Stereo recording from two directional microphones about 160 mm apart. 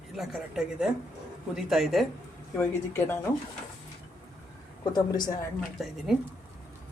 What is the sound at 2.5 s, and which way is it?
Speech, 10° left (ahead or behind).